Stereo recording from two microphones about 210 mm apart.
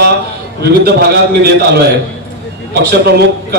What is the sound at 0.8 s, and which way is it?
Speech, 50° right (ahead or behind).